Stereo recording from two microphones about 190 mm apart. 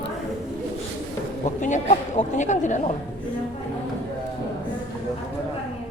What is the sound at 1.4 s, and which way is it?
Speech, 40° left (ahead or behind).